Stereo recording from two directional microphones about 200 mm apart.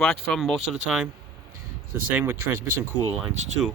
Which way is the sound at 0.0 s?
Centre (ahead or behind).